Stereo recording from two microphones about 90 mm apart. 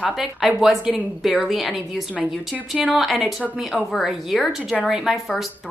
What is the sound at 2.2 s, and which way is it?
Speech, 15° right (ahead or behind).